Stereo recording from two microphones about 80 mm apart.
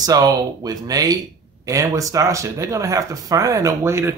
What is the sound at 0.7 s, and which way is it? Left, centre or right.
Speech, right.